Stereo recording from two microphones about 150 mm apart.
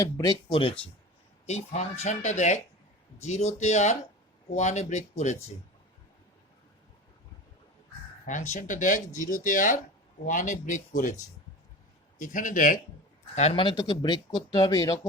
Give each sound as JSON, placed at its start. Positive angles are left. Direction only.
{"t": 0.0, "sound": "speech", "side_deg": 25}
{"t": 1.5, "sound": "speech", "side_deg": 50}
{"t": 8.3, "sound": "speech", "side_deg": 55}
{"t": 12.2, "sound": "speech", "side_deg": 60}
{"t": 13.3, "sound": "speech", "side_deg": 40}